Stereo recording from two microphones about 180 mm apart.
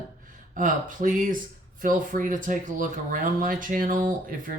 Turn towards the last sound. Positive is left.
turn(degrees=-50)  # may be behind; listen again after turning